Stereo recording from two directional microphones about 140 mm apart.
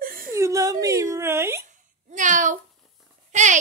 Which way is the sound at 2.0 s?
65° right (ahead or behind).